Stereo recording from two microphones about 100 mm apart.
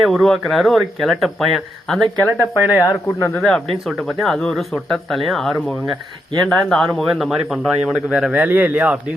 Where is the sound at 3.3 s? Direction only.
10° left (ahead or behind).